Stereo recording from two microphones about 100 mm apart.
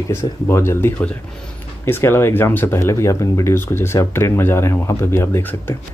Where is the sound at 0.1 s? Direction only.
25° left (ahead or behind).